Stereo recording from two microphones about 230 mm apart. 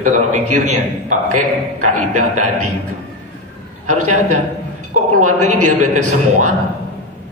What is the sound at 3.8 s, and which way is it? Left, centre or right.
A man's voice, right.